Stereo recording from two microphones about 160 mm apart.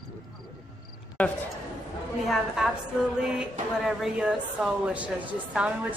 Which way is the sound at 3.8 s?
5° right (ahead or behind).